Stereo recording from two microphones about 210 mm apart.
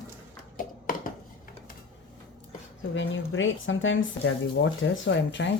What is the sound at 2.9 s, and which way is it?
Speech, 65° left (ahead or behind).